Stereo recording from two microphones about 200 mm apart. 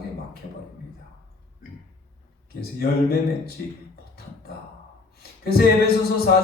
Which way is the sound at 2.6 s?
50° left (ahead or behind).